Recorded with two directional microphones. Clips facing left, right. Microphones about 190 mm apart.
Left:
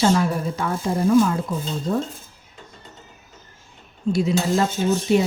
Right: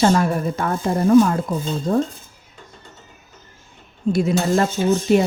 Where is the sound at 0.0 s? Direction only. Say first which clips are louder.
Right 2 dB; 55° right (ahead or behind).